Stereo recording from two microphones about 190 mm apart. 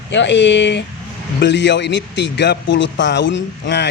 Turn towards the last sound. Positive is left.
turn(degrees=70)  # may be behind; listen again after turning